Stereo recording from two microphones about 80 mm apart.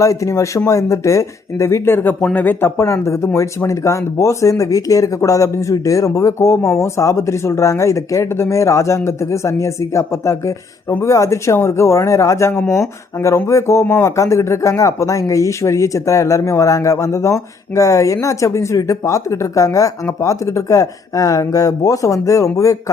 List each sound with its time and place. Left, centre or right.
0.0 s speech: left